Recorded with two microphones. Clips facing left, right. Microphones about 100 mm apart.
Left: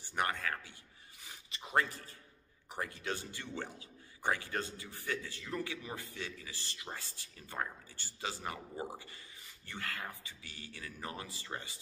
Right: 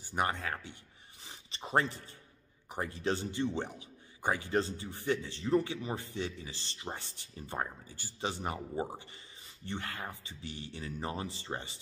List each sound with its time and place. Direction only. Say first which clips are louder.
0.1 s speech: right 2 dB; 20° right (ahead or behind)
1.2 s a sound: right 1 dB; 25° right (ahead or behind)
1.6 s speech: right 3 dB; 30° right (ahead or behind)